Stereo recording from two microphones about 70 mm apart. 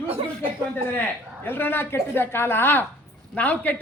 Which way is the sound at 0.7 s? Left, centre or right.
Left.